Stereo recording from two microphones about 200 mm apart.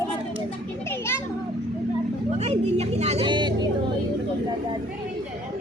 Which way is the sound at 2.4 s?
30° right (ahead or behind).